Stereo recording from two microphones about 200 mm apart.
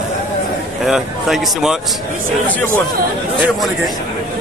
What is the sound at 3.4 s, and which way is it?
Speech, centre (ahead or behind).